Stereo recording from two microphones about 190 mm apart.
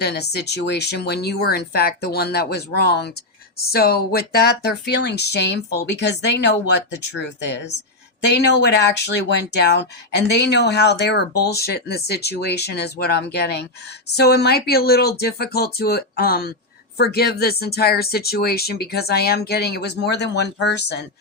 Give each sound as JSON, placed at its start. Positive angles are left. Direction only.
{"t": 0.0, "sound": "speech", "side_deg": 60}